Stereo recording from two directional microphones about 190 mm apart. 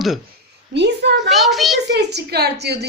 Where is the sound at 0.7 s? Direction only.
65° right (ahead or behind).